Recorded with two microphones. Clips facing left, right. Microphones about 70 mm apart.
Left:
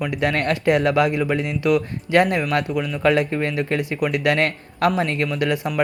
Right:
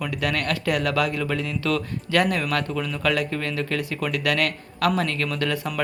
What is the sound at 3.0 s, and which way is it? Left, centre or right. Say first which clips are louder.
Speech: left 7 dB; left.